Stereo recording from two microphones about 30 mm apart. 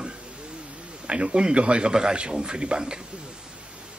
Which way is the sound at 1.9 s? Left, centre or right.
Right.